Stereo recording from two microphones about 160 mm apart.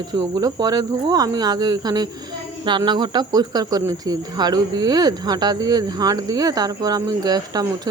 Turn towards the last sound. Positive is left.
turn(degrees=-25)  # may be behind; listen again after turning